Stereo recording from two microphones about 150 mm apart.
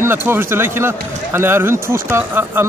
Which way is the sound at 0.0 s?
15° right (ahead or behind).